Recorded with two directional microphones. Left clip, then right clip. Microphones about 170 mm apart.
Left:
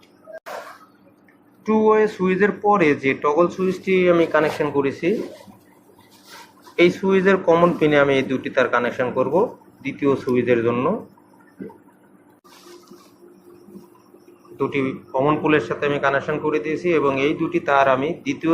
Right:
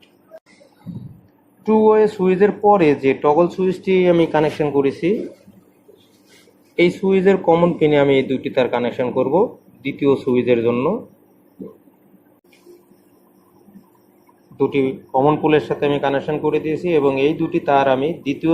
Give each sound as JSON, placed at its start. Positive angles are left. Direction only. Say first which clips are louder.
{"t": 1.7, "sound": "speech", "louder": "right 3 dB", "side_deg": -50}
{"t": 6.7, "sound": "speech", "louder": "right 1 dB", "side_deg": -45}
{"t": 14.7, "sound": "speech", "louder": "right 4 dB", "side_deg": -55}